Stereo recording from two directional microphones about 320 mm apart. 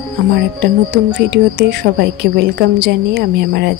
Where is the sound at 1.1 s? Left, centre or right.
Right.